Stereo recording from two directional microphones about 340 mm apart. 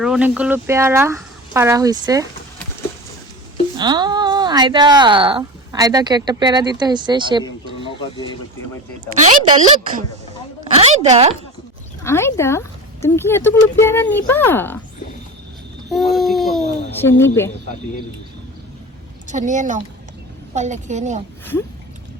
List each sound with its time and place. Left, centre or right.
0.0 s speech: centre
3.8 s speech: centre
7.9 s a sound: centre
9.2 s speech: centre
12.0 s speech: centre
15.9 s speech: centre
19.3 s a woman's voice: right